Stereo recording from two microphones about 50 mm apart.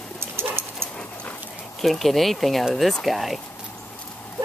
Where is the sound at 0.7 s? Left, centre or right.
Left.